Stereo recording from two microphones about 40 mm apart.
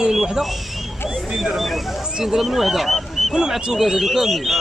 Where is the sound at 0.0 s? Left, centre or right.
Centre.